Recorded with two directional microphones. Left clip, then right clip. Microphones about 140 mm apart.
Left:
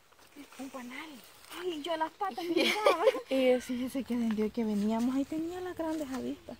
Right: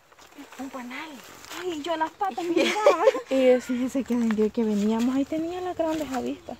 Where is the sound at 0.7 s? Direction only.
20° left (ahead or behind).